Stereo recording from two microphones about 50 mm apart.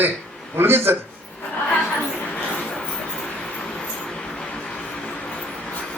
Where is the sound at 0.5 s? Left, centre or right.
Right.